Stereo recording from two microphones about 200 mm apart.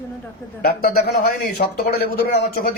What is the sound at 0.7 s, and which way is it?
A man's voice, 50° left (ahead or behind).